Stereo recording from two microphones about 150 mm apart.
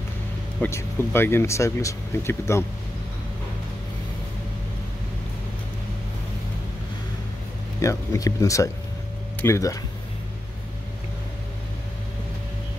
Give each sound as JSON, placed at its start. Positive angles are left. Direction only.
{"t": 0.6, "sound": "speech", "side_deg": 15}
{"t": 7.8, "sound": "speech", "side_deg": 20}